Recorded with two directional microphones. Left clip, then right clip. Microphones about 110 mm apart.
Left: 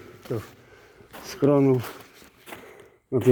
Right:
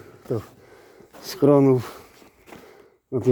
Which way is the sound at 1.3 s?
80° right.